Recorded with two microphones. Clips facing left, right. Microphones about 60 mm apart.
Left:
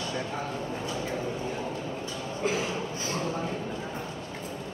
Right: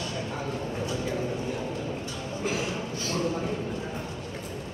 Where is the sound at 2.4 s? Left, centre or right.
Left.